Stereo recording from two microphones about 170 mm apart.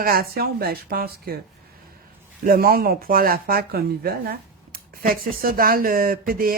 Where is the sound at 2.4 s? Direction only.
60° right (ahead or behind).